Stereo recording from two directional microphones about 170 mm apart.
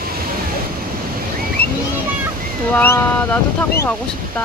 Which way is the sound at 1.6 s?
10° left (ahead or behind).